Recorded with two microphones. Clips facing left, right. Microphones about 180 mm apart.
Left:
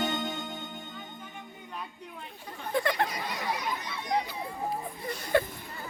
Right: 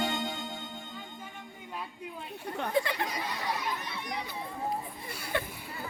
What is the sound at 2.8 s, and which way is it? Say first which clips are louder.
Chatter: left 5 dB; 60° left (ahead or behind).